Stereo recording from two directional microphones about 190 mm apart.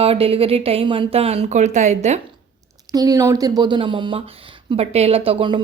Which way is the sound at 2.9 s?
20° right (ahead or behind).